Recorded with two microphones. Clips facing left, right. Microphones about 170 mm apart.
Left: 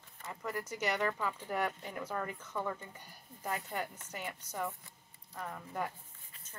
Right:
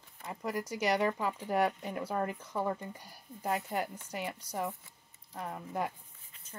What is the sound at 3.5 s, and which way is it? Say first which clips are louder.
Speech: right 5 dB; 30° right (ahead or behind).